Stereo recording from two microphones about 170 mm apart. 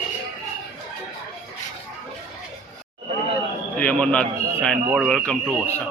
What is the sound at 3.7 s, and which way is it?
A man's voice, 5° left (ahead or behind).